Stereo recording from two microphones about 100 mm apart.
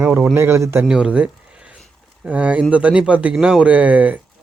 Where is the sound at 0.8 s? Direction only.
10° right (ahead or behind).